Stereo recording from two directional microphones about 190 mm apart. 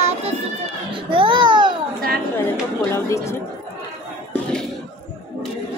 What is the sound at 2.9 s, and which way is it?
Speech, 15° left (ahead or behind).